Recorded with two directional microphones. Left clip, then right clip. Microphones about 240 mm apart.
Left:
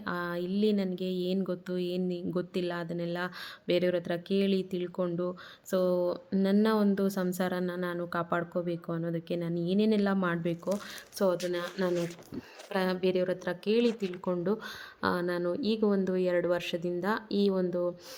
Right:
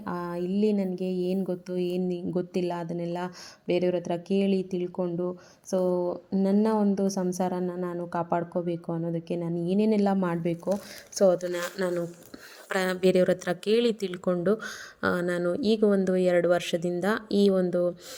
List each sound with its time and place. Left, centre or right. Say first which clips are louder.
0.0 s a woman's voice: right 1 dB; centre
1.0 s a woman's voice: right 3 dB; left
2.6 s a woman's voice: right 3 dB; centre
6.3 s a woman's voice: right 3 dB; centre